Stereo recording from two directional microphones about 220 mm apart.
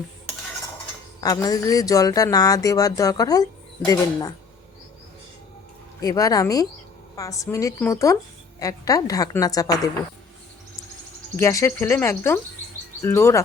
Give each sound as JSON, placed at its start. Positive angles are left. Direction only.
{"t": 1.2, "sound": "speech", "side_deg": 15}
{"t": 6.0, "sound": "speech", "side_deg": 15}
{"t": 11.3, "sound": "speech", "side_deg": 15}